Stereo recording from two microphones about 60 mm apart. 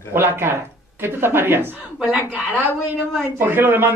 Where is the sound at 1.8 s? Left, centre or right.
Right.